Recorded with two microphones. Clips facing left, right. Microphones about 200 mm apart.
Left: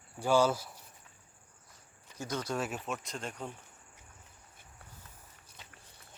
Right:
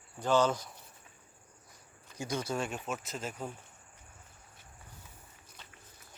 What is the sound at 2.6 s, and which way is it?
Speech, 5° left (ahead or behind).